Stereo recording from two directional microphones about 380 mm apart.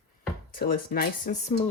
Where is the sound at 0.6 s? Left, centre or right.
Left.